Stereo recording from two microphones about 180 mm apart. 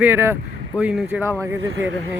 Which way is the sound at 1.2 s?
5° left (ahead or behind).